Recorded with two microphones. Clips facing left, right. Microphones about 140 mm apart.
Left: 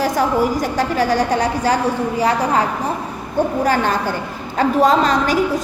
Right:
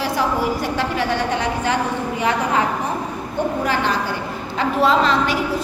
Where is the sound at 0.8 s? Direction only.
40° left (ahead or behind).